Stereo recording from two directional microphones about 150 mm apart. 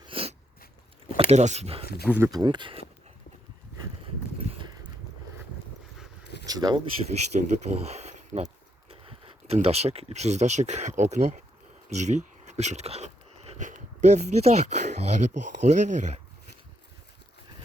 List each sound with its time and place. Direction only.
0.0 s a sound: 40° right (ahead or behind)
1.3 s speech: 50° right (ahead or behind)
1.8 s speech: 90° left
2.0 s speech: 10° right (ahead or behind)
2.3 s speech: 30° right (ahead or behind)
6.4 s a sound: 25° right (ahead or behind)
7.3 s speech: 50° right (ahead or behind)